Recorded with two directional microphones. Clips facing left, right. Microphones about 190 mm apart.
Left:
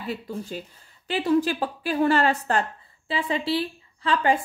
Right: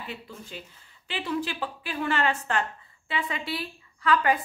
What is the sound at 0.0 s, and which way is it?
A woman's voice, 40° left (ahead or behind).